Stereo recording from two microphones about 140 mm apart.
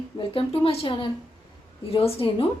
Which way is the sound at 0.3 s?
45° left (ahead or behind).